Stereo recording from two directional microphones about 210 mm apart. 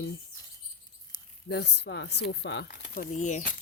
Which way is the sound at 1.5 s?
55° left (ahead or behind).